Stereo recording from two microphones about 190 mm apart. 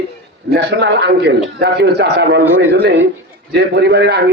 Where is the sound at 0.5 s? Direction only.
65° right (ahead or behind).